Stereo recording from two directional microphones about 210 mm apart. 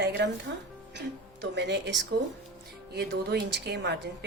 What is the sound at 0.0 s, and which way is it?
Music, 55° right (ahead or behind).